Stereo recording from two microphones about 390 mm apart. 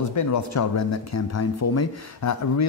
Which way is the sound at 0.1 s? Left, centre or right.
Left.